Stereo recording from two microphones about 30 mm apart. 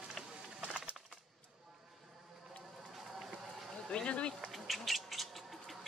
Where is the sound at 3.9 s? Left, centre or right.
Left.